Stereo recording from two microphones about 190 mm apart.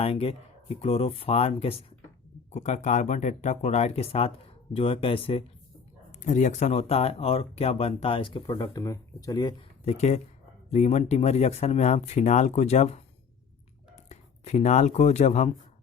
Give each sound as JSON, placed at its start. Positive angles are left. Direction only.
{"t": 0.0, "sound": "speech", "side_deg": 30}
{"t": 6.1, "sound": "speech", "side_deg": 40}
{"t": 9.8, "sound": "speech", "side_deg": 35}